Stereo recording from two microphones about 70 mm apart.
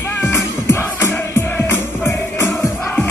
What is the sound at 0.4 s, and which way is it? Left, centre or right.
Music, left.